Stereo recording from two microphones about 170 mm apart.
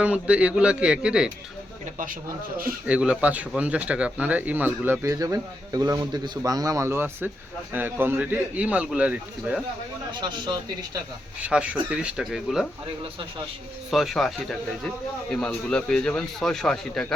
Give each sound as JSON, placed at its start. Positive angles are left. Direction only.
{"t": 0.0, "sound": "speech", "side_deg": -5}
{"t": 2.8, "sound": "speech", "side_deg": -5}
{"t": 10.1, "sound": "speech", "side_deg": -25}
{"t": 11.4, "sound": "speech", "side_deg": -5}
{"t": 13.9, "sound": "speech", "side_deg": 0}